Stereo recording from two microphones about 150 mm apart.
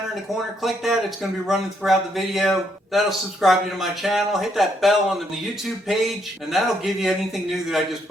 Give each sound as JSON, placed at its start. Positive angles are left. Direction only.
{"t": 0.6, "sound": "speech", "side_deg": 0}